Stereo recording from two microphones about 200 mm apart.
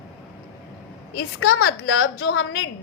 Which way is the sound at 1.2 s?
90° left.